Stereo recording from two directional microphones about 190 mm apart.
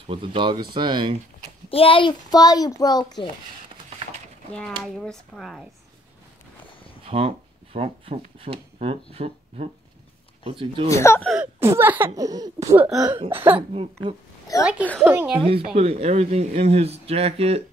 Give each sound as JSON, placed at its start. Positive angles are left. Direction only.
{"t": 0.0, "sound": "speech", "side_deg": -30}
{"t": 1.7, "sound": "a child's voice", "side_deg": 30}
{"t": 4.5, "sound": "speech", "side_deg": 5}
{"t": 7.1, "sound": "speech", "side_deg": -30}
{"t": 10.9, "sound": "speech", "side_deg": 15}
{"t": 11.6, "sound": "speech", "side_deg": -10}
{"t": 14.6, "sound": "speech", "side_deg": -5}
{"t": 15.6, "sound": "speech", "side_deg": -30}